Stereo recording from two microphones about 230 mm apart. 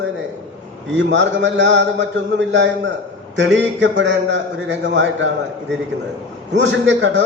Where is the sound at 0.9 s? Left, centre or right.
Right.